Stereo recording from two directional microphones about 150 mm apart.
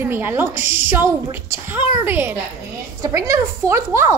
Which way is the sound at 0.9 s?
15° right (ahead or behind).